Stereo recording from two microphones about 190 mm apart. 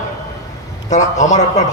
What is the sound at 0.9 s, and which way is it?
Speech, 40° left (ahead or behind).